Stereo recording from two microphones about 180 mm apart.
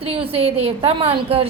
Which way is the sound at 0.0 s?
30° right (ahead or behind).